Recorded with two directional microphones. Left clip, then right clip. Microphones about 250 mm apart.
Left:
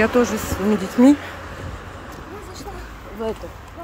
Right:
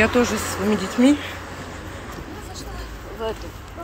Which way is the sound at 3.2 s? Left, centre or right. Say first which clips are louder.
Left 1 dB; left.